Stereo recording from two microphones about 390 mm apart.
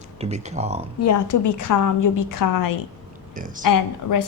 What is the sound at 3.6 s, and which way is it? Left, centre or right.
Speech, left.